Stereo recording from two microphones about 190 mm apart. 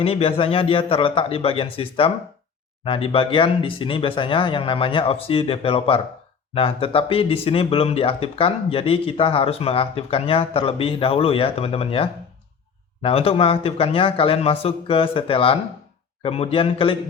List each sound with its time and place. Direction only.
0.0 s speech: 30° left (ahead or behind)